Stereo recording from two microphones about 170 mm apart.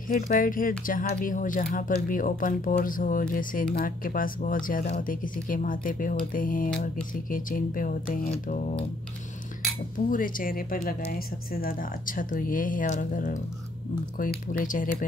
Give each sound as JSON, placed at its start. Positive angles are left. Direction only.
{"t": 0.1, "sound": "speech", "side_deg": 55}
{"t": 10.0, "sound": "speech", "side_deg": 55}